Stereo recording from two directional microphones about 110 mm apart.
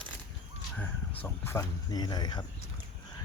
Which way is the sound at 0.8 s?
15° left (ahead or behind).